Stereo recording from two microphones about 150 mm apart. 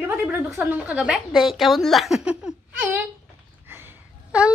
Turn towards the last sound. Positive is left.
turn(degrees=-10)  # may be behind; listen again after turning